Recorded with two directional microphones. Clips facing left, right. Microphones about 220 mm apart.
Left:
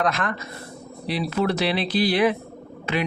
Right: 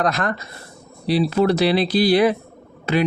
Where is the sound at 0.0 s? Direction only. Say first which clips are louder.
Right 3 dB; 40° right (ahead or behind).